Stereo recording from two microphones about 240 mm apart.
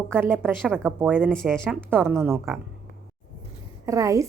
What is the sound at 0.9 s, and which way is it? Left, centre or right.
Speech, centre.